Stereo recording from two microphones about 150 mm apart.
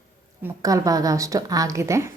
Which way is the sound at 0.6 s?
25° right (ahead or behind).